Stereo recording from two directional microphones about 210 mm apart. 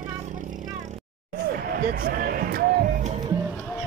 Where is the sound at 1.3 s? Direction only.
45° right (ahead or behind).